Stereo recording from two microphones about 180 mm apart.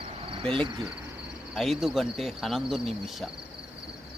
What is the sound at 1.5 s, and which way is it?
Speech, centre (ahead or behind).